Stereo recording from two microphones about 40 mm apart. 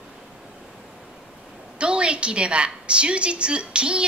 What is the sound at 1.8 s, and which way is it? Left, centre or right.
A woman's voice, right.